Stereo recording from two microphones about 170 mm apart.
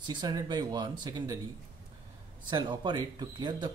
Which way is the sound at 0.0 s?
25° right (ahead or behind).